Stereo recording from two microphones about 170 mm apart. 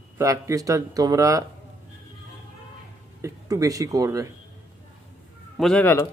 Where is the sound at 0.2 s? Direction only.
20° right (ahead or behind).